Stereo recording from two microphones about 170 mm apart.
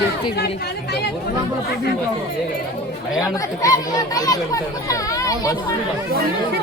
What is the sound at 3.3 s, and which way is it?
A child's voice, 20° left (ahead or behind).